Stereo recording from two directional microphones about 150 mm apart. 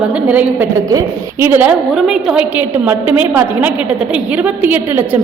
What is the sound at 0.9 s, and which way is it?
Speech, 25° right (ahead or behind).